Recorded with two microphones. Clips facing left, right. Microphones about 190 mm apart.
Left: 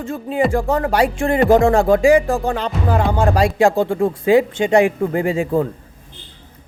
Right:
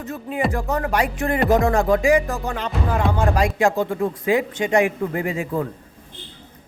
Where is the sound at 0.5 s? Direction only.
30° left (ahead or behind).